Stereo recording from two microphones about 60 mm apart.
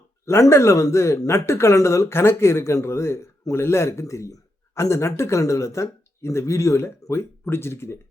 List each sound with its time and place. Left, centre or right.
0.4 s speech: left